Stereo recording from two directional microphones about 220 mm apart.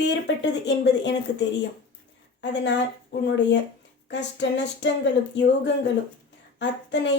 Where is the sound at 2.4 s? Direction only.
55° left (ahead or behind).